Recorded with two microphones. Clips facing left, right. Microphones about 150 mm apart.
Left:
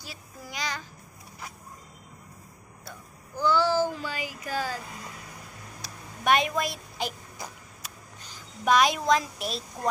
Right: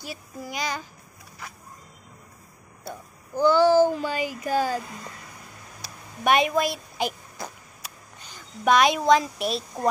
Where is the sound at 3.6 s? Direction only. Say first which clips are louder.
Right 8 dB; 55° right (ahead or behind).